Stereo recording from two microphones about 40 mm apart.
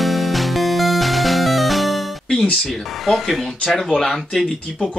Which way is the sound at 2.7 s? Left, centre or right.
Centre.